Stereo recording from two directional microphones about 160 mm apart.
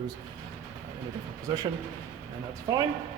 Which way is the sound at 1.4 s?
25° right (ahead or behind).